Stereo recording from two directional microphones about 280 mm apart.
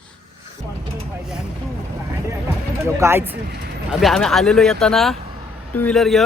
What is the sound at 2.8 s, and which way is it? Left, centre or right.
Speech, centre.